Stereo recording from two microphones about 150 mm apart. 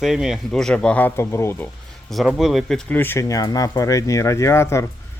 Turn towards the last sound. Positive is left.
turn(degrees=20)  # may be behind; listen again after turning